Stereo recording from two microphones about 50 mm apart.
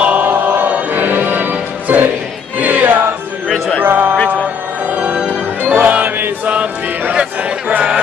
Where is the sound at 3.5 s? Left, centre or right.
Centre.